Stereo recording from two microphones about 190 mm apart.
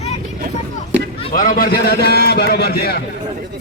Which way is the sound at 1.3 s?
50° left (ahead or behind).